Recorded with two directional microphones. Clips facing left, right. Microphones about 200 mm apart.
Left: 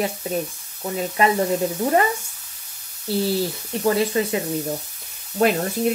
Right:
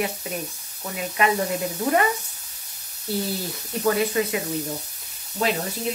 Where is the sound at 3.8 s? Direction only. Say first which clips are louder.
Left 2 dB; 30° left (ahead or behind).